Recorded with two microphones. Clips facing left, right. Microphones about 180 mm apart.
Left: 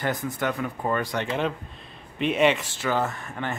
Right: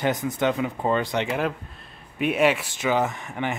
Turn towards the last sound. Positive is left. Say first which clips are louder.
# right 3 dB
turn(degrees=-15)  # may be behind; listen again after turning